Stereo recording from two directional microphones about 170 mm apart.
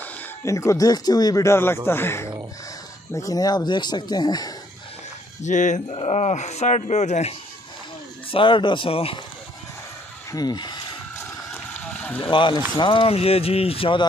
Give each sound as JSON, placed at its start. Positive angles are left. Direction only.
{"t": 0.0, "sound": "speech", "side_deg": 15}
{"t": 5.4, "sound": "speech", "side_deg": 45}
{"t": 8.3, "sound": "speech", "side_deg": 30}
{"t": 10.3, "sound": "speech", "side_deg": 25}
{"t": 11.5, "sound": "a sound", "side_deg": 10}
{"t": 12.2, "sound": "speech", "side_deg": 30}